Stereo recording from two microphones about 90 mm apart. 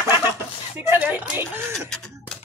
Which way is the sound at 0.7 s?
20° right (ahead or behind).